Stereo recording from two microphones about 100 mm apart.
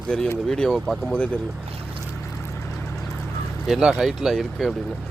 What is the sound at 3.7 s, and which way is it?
Speech, 5° right (ahead or behind).